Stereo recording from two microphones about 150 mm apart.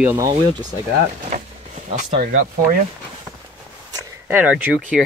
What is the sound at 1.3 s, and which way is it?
Speech, 60° right (ahead or behind).